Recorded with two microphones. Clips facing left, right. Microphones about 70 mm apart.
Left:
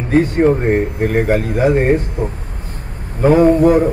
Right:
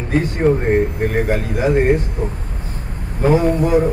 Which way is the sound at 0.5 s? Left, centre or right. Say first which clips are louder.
Left 1 dB; left.